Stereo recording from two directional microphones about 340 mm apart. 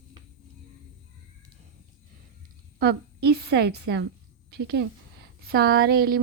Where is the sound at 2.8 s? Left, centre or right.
Right.